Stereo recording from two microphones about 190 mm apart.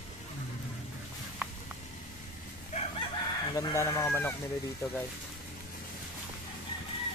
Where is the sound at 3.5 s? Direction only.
15° left (ahead or behind).